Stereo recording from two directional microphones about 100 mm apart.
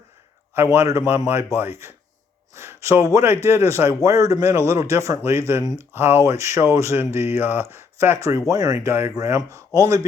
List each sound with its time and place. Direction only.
0.5 s speech: 25° right (ahead or behind)